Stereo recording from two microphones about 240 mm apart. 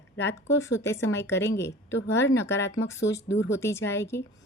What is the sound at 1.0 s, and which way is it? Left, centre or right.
Speech, left.